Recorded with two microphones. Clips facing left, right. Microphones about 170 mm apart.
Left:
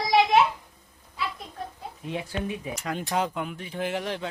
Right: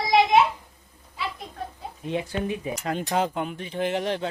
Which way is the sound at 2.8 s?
30° right (ahead or behind).